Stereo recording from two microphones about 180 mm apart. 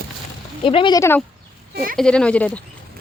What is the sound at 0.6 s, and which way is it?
Speech, 30° left (ahead or behind).